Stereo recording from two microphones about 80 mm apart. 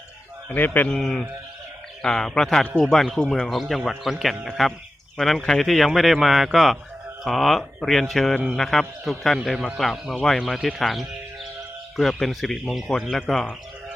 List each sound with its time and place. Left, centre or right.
0.4 s a man's voice: left
0.9 s speech: centre